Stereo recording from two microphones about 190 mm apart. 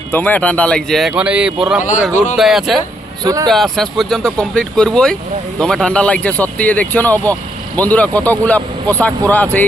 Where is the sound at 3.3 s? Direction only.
20° right (ahead or behind).